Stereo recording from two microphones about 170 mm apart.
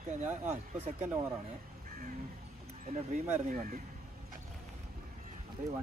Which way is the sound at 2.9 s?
45° right (ahead or behind).